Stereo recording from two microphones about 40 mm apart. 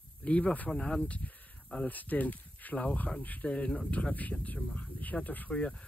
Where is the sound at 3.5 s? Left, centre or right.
Left.